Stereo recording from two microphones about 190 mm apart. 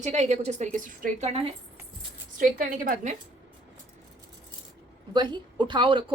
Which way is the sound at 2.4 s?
45° right (ahead or behind).